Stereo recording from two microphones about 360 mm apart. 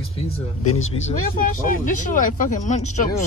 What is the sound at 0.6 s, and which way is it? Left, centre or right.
Speech, left.